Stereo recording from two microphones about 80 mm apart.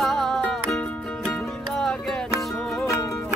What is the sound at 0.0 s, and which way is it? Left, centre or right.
Music, centre.